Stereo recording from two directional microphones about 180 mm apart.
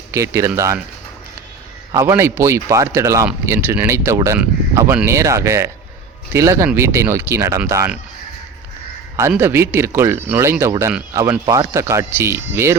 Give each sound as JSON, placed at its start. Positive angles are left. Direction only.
{"t": 0.1, "sound": "speech", "side_deg": -15}
{"t": 1.9, "sound": "speech", "side_deg": -15}
{"t": 9.4, "sound": "speech", "side_deg": -15}